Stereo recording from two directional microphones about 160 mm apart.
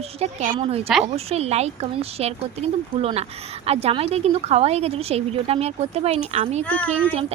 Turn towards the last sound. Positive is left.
turn(degrees=10)  # may be behind; listen again after turning